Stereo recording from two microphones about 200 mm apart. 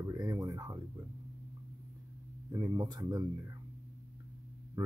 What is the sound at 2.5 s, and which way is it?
Speech, 20° right (ahead or behind).